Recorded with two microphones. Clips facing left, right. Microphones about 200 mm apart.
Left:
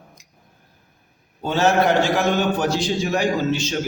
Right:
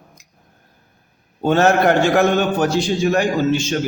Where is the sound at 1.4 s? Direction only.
55° right (ahead or behind).